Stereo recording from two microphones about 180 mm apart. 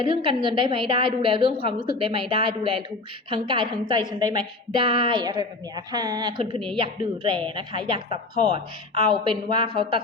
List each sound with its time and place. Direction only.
0.0 s a woman's voice: 30° right (ahead or behind)